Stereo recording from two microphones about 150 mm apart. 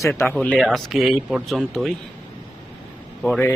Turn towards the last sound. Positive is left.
turn(degrees=5)  # may be behind; listen again after turning